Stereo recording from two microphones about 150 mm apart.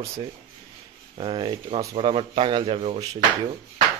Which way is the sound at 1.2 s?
35° right (ahead or behind).